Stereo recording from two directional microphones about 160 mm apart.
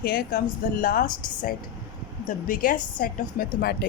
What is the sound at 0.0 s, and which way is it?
Speech, 70° left (ahead or behind).